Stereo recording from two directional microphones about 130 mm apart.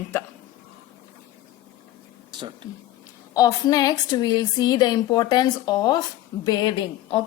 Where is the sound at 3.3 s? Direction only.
30° left (ahead or behind).